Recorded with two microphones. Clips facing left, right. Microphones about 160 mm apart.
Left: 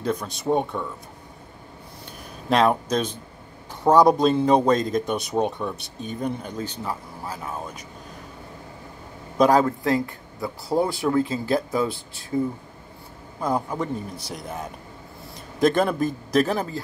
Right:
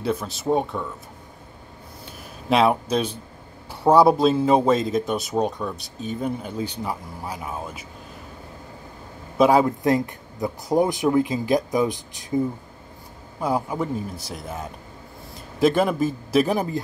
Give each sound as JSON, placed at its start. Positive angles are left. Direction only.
{"t": 0.0, "sound": "speech", "side_deg": -5}
{"t": 2.5, "sound": "speech", "side_deg": -5}
{"t": 9.4, "sound": "speech", "side_deg": -10}
{"t": 9.7, "sound": "speech", "side_deg": -20}
{"t": 13.4, "sound": "a man's voice", "side_deg": -10}